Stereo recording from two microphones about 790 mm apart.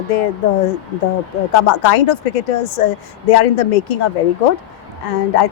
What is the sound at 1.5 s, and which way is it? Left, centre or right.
A woman's voice, left.